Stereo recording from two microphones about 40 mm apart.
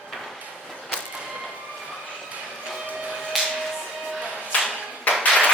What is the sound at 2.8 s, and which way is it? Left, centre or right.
Printer, right.